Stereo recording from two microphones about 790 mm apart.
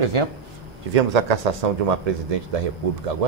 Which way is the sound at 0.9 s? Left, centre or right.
Right.